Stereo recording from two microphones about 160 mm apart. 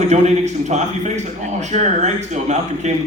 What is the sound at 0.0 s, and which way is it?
A man's voice, 45° right (ahead or behind).